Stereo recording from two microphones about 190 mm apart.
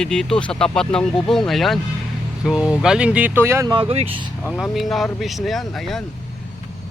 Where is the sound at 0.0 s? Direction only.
5° left (ahead or behind); by 3.8 s 15° right (ahead or behind).